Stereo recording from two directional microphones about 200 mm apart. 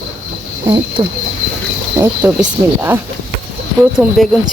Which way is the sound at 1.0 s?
25° right (ahead or behind).